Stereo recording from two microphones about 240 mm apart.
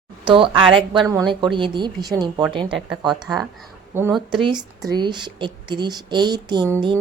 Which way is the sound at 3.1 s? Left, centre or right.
Centre.